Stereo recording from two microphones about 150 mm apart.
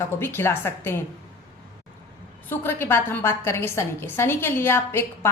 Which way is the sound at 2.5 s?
15° left (ahead or behind).